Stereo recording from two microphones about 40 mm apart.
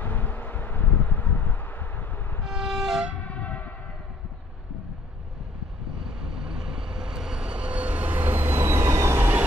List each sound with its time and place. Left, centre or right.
0.0 s a sound: left
2.4 s vehicle: centre
3.2 s train: left
5.9 s vehicle: centre; by 8.2 s right
8.2 s train: right